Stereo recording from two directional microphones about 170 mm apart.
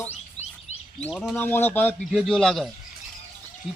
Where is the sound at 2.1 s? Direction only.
Centre (ahead or behind).